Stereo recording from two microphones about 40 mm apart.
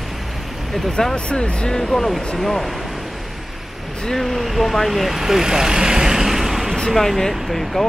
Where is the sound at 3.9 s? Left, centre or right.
Centre.